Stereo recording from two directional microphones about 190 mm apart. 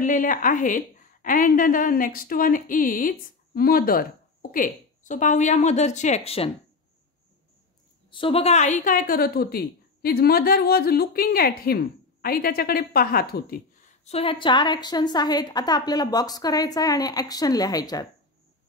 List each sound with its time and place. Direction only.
0.0 s a woman's voice: 45° left (ahead or behind)
8.1 s a woman's voice: 30° left (ahead or behind); by 13.6 s 55° left (ahead or behind)
14.0 s a woman's voice: 30° left (ahead or behind)